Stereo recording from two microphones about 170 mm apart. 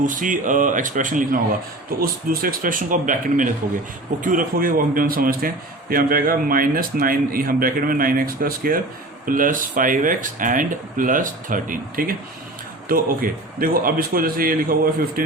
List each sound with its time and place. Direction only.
0.0 s a man's voice: 50° right (ahead or behind)